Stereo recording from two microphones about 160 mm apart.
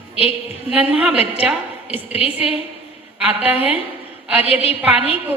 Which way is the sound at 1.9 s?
40° left (ahead or behind).